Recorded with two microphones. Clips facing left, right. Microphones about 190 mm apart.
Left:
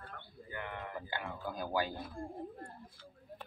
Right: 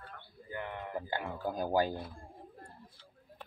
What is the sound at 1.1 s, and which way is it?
Speech, 45° right (ahead or behind).